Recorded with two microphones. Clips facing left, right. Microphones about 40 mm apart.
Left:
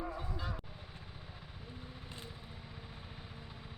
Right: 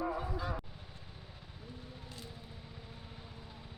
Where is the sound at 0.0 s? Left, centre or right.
Centre.